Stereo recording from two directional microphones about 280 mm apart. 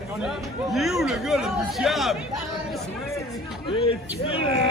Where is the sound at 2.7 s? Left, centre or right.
Centre.